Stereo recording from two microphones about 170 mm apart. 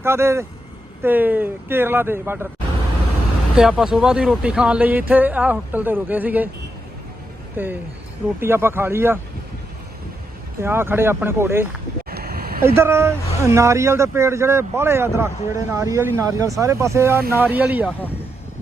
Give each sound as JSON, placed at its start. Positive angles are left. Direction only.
{"t": 0.0, "sound": "speech", "side_deg": -15}
{"t": 3.5, "sound": "speech", "side_deg": -5}
{"t": 7.5, "sound": "speech", "side_deg": -10}
{"t": 10.6, "sound": "speech", "side_deg": -15}
{"t": 12.1, "sound": "vehicle", "side_deg": -65}
{"t": 12.6, "sound": "speech", "side_deg": -15}